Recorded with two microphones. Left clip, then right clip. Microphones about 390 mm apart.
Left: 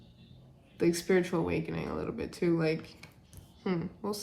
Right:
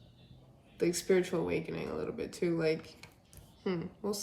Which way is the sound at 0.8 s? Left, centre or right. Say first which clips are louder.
Left 2 dB; centre.